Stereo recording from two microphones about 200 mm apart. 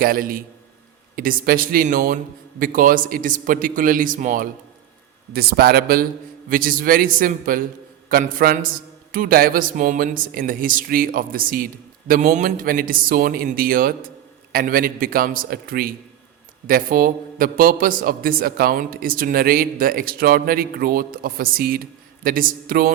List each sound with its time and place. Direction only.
0.0 s a man's voice: 45° right (ahead or behind)